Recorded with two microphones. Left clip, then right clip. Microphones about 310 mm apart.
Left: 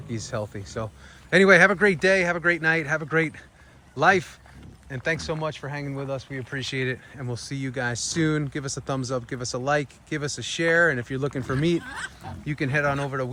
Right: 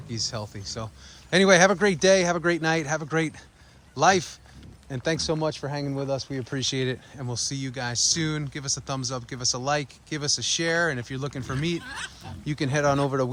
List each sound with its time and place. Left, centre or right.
0.1 s speech: centre